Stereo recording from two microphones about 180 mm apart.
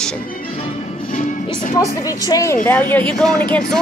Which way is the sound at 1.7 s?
20° left (ahead or behind).